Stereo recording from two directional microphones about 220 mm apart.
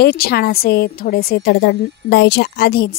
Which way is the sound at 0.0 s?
45° left (ahead or behind).